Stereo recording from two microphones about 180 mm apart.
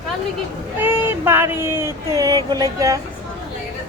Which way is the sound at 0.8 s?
10° right (ahead or behind).